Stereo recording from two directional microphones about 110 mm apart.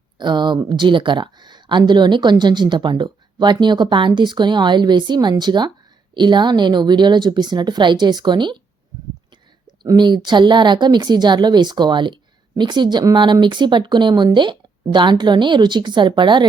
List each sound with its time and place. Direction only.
0.2 s speech: 45° right (ahead or behind)
9.6 s speech: 40° right (ahead or behind)